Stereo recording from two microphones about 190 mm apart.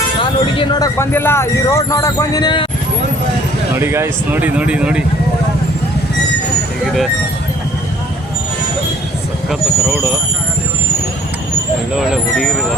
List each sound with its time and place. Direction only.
0.2 s speech: 25° left (ahead or behind)
3.8 s speech: 15° right (ahead or behind)
6.8 s vehicle: centre (ahead or behind)
9.5 s speech: centre (ahead or behind)
11.9 s speech: centre (ahead or behind)